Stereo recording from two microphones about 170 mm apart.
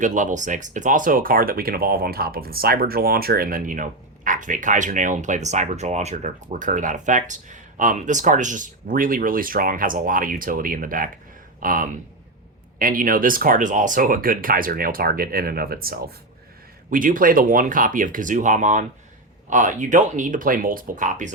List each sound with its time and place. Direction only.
0.0 s speech: 45° right (ahead or behind)